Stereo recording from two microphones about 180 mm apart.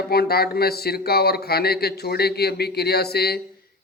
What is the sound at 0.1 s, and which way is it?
Speech, 60° left (ahead or behind).